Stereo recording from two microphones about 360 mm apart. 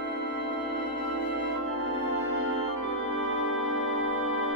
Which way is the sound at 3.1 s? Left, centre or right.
Right.